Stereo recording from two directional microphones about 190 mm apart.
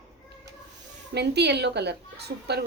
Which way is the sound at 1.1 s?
60° right (ahead or behind).